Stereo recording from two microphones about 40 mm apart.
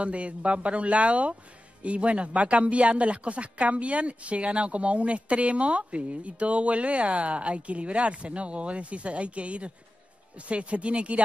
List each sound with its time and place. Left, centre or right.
0.0 s speech: right